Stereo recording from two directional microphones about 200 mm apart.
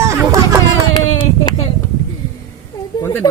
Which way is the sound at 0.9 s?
25° left (ahead or behind).